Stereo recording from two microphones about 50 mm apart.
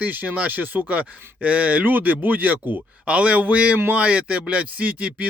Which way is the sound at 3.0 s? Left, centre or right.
Right.